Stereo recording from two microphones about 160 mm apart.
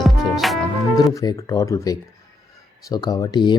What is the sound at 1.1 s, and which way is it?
Speech, 20° left (ahead or behind).